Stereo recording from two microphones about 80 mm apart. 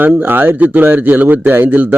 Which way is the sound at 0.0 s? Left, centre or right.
Right.